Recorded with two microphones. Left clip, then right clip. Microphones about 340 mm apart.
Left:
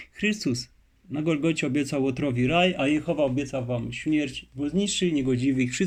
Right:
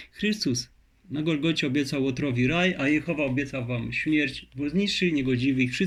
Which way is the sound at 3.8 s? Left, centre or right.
Centre.